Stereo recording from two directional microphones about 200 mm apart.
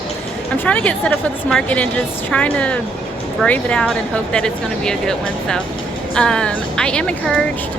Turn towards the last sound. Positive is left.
turn(degrees=5)  # may be behind; listen again after turning